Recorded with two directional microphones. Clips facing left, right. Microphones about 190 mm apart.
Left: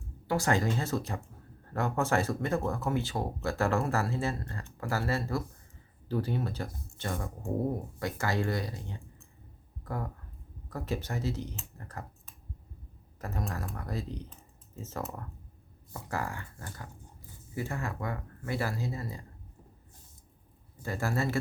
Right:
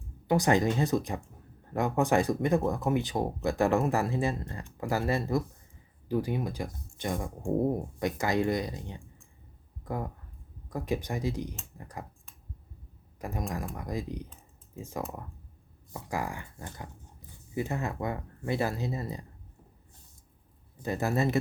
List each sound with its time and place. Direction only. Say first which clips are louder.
0.3 s speech: right 4 dB; 15° right (ahead or behind)
20.8 s speech: right 3 dB; 20° right (ahead or behind)